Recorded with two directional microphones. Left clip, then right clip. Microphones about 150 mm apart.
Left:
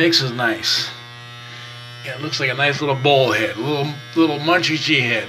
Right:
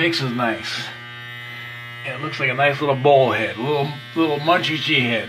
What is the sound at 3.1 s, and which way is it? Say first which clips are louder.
Speech: even; 5° right (ahead or behind).